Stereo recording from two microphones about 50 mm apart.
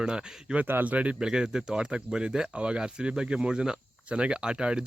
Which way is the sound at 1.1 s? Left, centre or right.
Centre.